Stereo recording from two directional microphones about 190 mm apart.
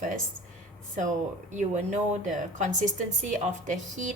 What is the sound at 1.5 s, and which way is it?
A woman's voice, 40° right (ahead or behind).